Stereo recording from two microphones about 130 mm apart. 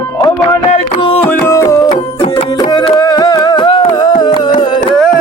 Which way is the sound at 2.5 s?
35° left (ahead or behind).